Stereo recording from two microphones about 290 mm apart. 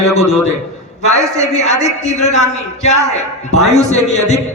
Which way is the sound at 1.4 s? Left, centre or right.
Left.